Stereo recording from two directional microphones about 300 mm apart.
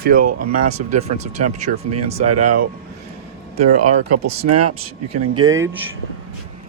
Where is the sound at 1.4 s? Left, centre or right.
Right.